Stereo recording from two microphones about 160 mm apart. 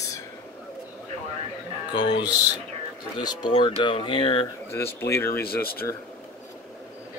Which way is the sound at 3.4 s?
30° left (ahead or behind).